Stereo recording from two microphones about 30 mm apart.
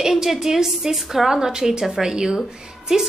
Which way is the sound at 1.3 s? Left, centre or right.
Right.